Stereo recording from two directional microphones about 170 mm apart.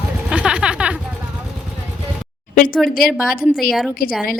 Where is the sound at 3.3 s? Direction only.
55° left (ahead or behind).